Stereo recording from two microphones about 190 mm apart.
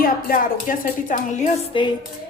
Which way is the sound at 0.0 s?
50° left (ahead or behind).